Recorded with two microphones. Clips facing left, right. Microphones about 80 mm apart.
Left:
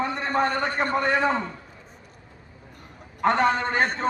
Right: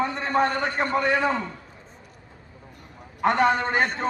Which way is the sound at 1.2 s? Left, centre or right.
Left.